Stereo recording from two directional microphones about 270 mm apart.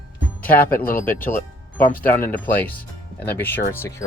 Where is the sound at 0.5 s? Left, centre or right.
Left.